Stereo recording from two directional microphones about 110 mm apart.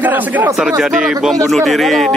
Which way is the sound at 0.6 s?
5° right (ahead or behind).